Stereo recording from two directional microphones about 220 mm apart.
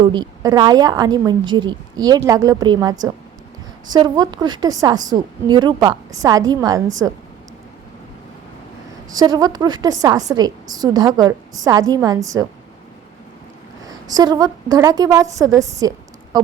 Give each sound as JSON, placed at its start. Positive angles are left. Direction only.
{"t": 0.0, "sound": "a woman's voice", "side_deg": -20}
{"t": 9.1, "sound": "a woman's voice", "side_deg": -20}
{"t": 13.8, "sound": "a woman's voice", "side_deg": -15}